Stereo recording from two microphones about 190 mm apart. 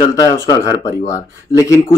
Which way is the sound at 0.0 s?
20° left (ahead or behind).